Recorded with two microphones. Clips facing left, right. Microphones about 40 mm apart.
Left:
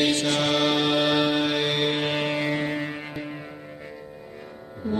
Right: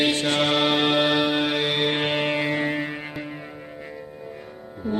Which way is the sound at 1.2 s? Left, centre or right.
Centre.